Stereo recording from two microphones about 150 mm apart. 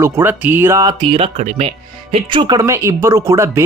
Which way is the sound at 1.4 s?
50° right (ahead or behind).